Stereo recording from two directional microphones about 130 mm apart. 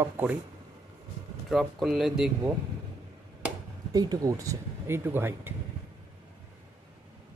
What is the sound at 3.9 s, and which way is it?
Speech, 30° right (ahead or behind).